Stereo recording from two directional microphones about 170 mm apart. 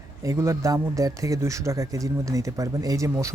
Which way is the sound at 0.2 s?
15° right (ahead or behind).